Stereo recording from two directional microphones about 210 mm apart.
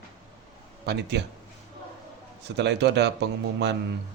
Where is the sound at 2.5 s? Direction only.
55° right (ahead or behind).